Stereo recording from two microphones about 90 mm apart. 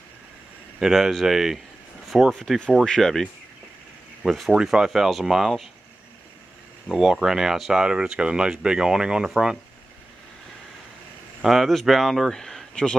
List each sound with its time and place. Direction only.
0.7 s speech: 5° right (ahead or behind)
2.0 s a sound: 5° right (ahead or behind)
2.3 s speech: 5° left (ahead or behind)
4.2 s speech: 5° right (ahead or behind)
6.9 s speech: 5° right (ahead or behind)
11.4 s speech: centre (ahead or behind)